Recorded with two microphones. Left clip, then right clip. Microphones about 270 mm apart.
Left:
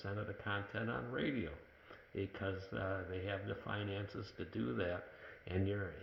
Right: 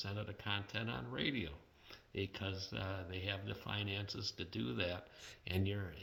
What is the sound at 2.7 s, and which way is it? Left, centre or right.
Speech, right.